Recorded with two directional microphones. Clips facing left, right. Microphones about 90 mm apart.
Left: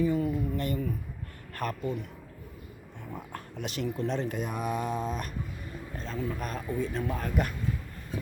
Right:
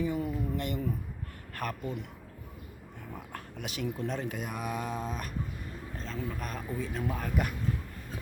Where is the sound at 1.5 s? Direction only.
5° right (ahead or behind).